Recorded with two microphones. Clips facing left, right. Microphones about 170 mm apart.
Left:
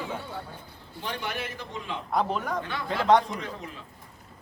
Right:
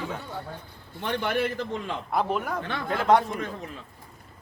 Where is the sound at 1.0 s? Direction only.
55° right (ahead or behind).